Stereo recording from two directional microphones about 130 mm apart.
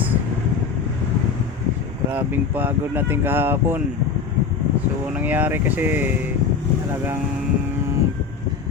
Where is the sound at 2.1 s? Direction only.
15° right (ahead or behind).